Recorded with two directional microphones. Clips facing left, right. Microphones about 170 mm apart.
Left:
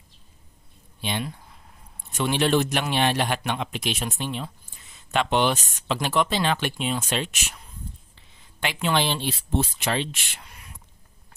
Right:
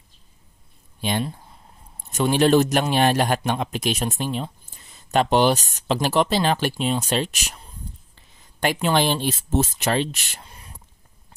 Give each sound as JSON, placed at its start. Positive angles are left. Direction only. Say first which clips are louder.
{"t": 2.1, "sound": "a man's voice", "louder": "right 5 dB", "side_deg": -40}
{"t": 8.8, "sound": "speech", "louder": "right 2 dB", "side_deg": -45}